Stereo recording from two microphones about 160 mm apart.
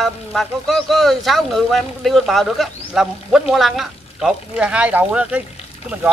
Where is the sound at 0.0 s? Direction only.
Centre (ahead or behind).